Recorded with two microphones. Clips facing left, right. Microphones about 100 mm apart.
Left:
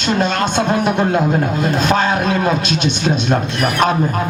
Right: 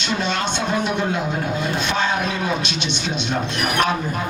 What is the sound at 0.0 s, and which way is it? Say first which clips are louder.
Speech: left 6 dB; 45° left (ahead or behind).